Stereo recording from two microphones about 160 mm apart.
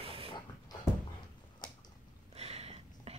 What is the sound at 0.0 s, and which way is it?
Dog, 35° right (ahead or behind).